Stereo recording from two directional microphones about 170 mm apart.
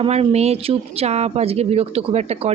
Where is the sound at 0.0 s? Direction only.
35° right (ahead or behind).